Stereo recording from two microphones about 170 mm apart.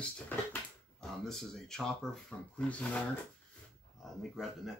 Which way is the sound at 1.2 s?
5° left (ahead or behind).